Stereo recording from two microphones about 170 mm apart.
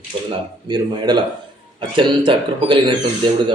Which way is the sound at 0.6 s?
25° right (ahead or behind).